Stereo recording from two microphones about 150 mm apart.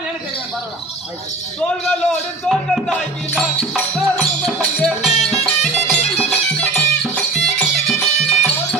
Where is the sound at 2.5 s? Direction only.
Centre (ahead or behind).